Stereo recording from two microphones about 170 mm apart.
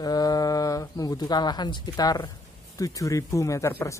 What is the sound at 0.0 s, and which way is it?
Bird, 20° left (ahead or behind).